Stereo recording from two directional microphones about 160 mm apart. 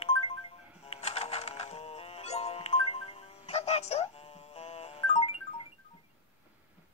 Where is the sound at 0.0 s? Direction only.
35° left (ahead or behind).